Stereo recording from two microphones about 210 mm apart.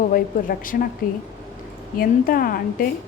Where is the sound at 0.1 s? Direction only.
40° left (ahead or behind).